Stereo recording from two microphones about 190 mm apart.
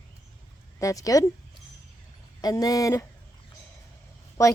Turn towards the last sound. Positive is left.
turn(degrees=15)  # may be behind; listen again after turning